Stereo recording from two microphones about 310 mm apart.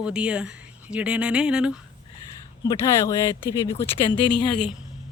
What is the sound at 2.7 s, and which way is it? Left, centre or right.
Speech, centre.